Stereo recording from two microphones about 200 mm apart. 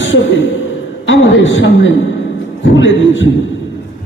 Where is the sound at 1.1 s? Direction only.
70° left (ahead or behind).